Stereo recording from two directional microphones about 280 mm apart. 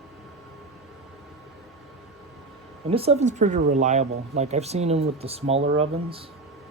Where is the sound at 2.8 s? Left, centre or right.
Right.